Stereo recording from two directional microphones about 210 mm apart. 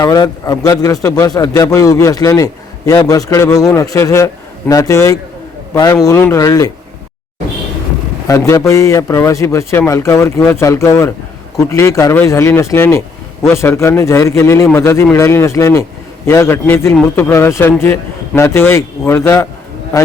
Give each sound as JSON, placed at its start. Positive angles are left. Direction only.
{"t": 0.0, "sound": "a man's voice", "side_deg": 20}
{"t": 8.3, "sound": "a man's voice", "side_deg": 15}